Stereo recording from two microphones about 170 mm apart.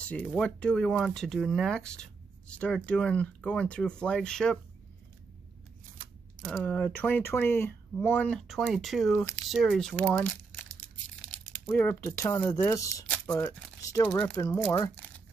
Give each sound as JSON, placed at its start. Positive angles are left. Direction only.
{"t": 0.0, "sound": "speech", "side_deg": 10}
{"t": 6.4, "sound": "speech", "side_deg": 5}
{"t": 11.4, "sound": "speech", "side_deg": 10}